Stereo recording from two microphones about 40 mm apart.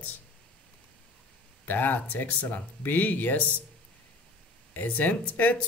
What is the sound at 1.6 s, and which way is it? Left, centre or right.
Speech, left.